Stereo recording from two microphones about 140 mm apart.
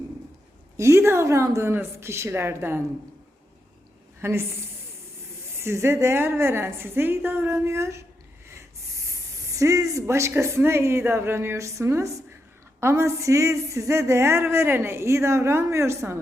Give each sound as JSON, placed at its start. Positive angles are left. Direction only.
{"t": 0.8, "sound": "speech", "side_deg": -20}
{"t": 4.2, "sound": "a woman's voice", "side_deg": -20}
{"t": 5.5, "sound": "a woman's voice", "side_deg": -20}
{"t": 8.4, "sound": "a sound", "side_deg": -20}
{"t": 9.6, "sound": "speech", "side_deg": -25}